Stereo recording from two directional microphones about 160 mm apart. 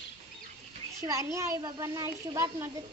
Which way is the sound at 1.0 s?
20° right (ahead or behind).